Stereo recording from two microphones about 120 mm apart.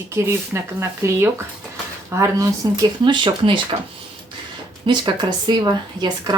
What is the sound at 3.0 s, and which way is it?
Speech, 40° right (ahead or behind).